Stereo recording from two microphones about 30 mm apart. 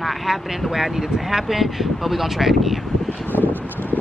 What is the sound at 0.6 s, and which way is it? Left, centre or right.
Speech, centre.